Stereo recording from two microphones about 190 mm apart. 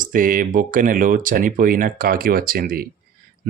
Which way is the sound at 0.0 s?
45° right (ahead or behind).